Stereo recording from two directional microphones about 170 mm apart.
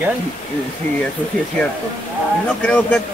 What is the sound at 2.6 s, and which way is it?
Speech, 10° left (ahead or behind).